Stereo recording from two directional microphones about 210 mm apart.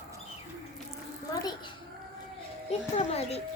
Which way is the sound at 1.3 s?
20° left (ahead or behind).